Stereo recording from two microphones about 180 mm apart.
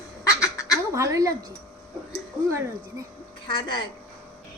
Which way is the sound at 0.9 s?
15° right (ahead or behind).